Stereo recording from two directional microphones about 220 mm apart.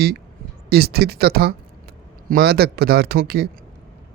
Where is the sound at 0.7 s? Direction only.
45° right (ahead or behind).